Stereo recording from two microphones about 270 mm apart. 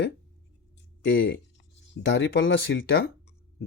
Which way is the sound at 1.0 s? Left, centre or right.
Left.